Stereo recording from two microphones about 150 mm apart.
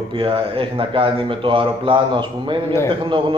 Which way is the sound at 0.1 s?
35° right (ahead or behind).